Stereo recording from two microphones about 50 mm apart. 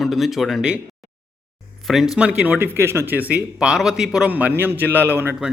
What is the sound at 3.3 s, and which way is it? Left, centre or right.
Speech, centre.